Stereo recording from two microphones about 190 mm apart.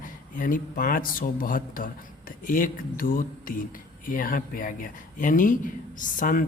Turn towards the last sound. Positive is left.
turn(degrees=45)  # may be behind; listen again after turning